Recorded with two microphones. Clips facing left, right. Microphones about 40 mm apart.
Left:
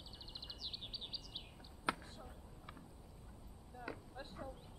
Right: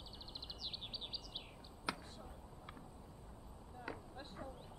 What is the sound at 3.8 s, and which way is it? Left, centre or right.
Vehicle, centre.